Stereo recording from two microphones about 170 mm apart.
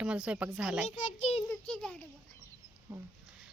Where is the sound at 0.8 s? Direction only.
45° left (ahead or behind).